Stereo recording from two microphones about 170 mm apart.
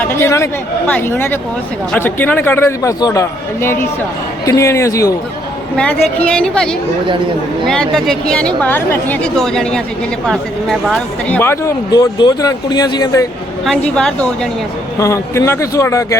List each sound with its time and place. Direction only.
0.0 s a man's voice: 15° left (ahead or behind)
5.7 s a man's voice: 10° left (ahead or behind)
11.3 s speech: 15° left (ahead or behind)
13.7 s a woman's voice: 5° left (ahead or behind)
14.9 s a man's voice: 20° left (ahead or behind)